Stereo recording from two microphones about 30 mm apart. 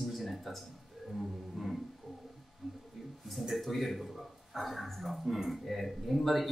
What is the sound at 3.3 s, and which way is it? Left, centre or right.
A man's voice, centre.